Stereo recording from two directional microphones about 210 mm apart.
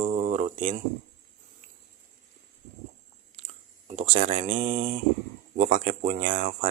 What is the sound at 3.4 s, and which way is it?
Speech, 35° right (ahead or behind).